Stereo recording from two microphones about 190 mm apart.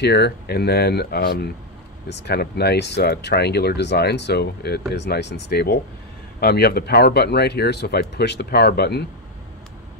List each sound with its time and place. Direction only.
0.0 s speech: 60° left (ahead or behind)